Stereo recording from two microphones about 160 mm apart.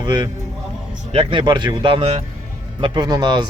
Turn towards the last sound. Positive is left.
turn(degrees=-25)  # may be behind; listen again after turning